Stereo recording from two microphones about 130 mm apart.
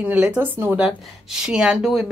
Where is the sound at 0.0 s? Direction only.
10° right (ahead or behind).